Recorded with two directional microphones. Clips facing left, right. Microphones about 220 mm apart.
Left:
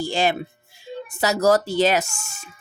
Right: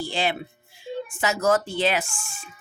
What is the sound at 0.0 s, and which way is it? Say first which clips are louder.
A woman's voice: left 4 dB; 45° left (ahead or behind).